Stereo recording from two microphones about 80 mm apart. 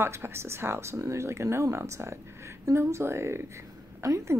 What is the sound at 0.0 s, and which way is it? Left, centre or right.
Speech, right.